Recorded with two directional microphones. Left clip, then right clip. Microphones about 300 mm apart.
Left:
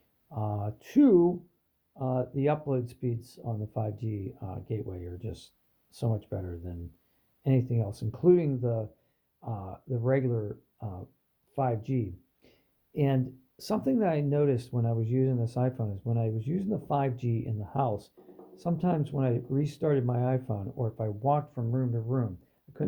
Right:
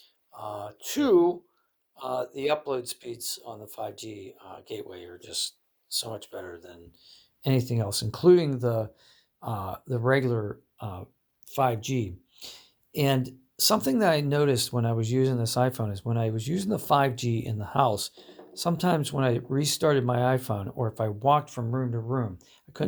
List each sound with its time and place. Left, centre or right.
0.8 s speech: centre